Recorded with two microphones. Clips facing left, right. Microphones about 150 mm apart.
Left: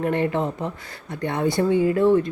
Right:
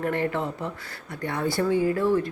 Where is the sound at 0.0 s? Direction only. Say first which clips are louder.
Left 4 dB; 20° left (ahead or behind).